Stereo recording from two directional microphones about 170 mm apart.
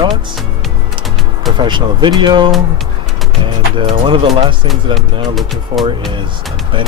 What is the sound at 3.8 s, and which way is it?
Speech, 30° right (ahead or behind).